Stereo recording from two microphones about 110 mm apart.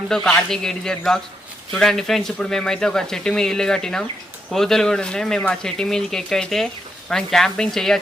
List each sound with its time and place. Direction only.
0.3 s speech: 5° left (ahead or behind)